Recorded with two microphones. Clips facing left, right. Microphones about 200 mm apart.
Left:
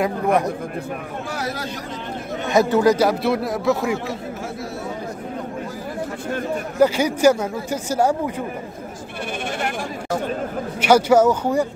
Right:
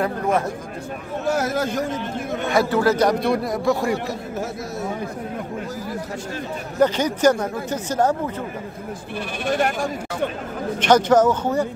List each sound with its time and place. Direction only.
1.2 s a man's voice: 45° right (ahead or behind)
2.5 s speech: 20° left (ahead or behind)
3.1 s speech: 5° left (ahead or behind)
6.8 s speech: 10° left (ahead or behind)
10.8 s speech: 10° left (ahead or behind)